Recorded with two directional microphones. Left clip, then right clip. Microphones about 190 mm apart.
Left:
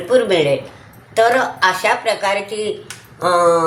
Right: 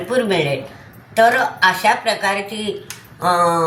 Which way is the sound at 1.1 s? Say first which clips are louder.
Even; 30° left (ahead or behind).